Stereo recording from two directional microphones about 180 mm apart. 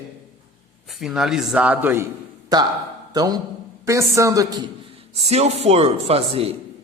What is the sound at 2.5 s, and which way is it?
A man's voice, 20° right (ahead or behind).